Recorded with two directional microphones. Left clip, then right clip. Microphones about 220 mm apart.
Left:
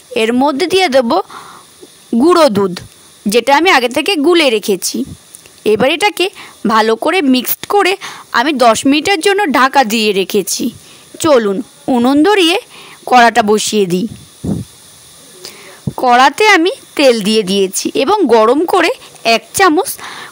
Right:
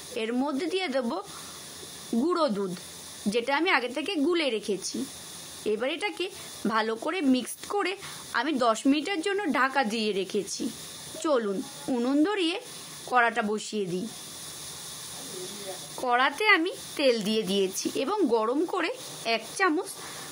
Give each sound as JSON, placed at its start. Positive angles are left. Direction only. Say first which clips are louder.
{"t": 0.1, "sound": "speech", "louder": "left 18 dB", "side_deg": 50}
{"t": 2.2, "sound": "speech", "louder": "left 19 dB", "side_deg": 45}
{"t": 16.0, "sound": "speech", "louder": "left 17 dB", "side_deg": 45}